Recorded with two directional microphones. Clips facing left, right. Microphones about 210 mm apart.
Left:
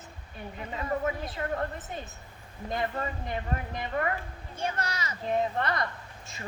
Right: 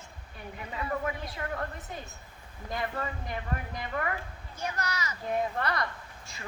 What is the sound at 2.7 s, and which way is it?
A woman's voice, 25° left (ahead or behind).